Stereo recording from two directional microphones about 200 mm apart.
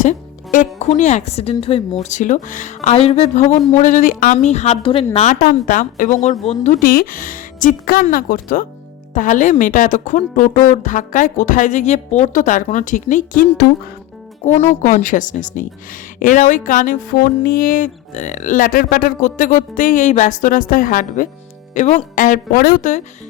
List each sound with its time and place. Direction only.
0.0 s a woman's voice: 40° left (ahead or behind)
5.1 s a woman's voice: 35° left (ahead or behind)